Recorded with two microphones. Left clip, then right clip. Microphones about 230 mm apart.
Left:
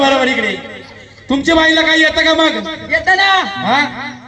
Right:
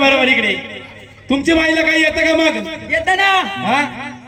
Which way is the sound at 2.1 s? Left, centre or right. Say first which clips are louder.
Left 2 dB; left.